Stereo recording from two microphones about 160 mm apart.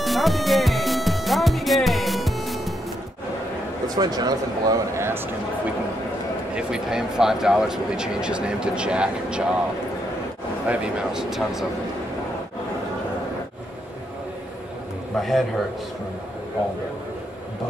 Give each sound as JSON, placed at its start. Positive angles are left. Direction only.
{"t": 0.0, "sound": "music", "side_deg": 0}
{"t": 3.9, "sound": "speech", "side_deg": -25}
{"t": 6.5, "sound": "speech", "side_deg": -5}
{"t": 10.7, "sound": "speech", "side_deg": -5}
{"t": 15.1, "sound": "speech", "side_deg": 0}